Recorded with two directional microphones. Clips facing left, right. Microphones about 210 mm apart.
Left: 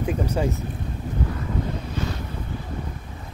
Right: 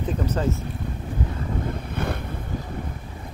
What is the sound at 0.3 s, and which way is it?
Speech, 15° left (ahead or behind).